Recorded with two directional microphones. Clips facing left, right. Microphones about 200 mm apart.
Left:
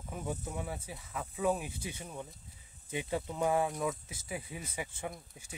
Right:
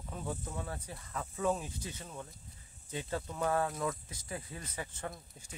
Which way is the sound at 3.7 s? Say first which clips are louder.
Left 1 dB; centre (ahead or behind).